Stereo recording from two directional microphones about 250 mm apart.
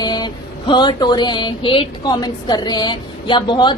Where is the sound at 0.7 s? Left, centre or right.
Centre.